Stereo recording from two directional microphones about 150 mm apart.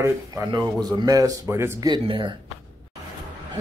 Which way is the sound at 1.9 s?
30° right (ahead or behind).